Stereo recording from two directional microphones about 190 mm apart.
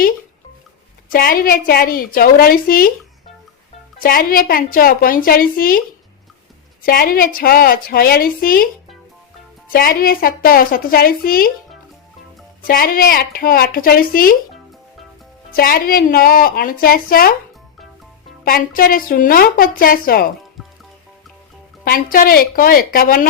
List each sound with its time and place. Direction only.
1.1 s a woman's voice: 50° left (ahead or behind)
4.0 s a woman's voice: 50° left (ahead or behind)
6.8 s a woman's voice: 50° left (ahead or behind)
9.7 s a woman's voice: 50° left (ahead or behind)
12.6 s a woman's voice: 50° left (ahead or behind)
15.5 s a woman's voice: 50° left (ahead or behind)
18.4 s a woman's voice: 50° left (ahead or behind)
21.8 s a woman's voice: 50° left (ahead or behind)